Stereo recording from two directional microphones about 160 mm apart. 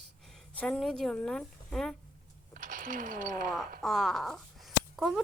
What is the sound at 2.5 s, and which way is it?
Speech, 55° right (ahead or behind).